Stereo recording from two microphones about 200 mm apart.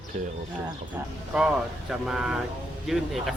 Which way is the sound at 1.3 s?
5° right (ahead or behind).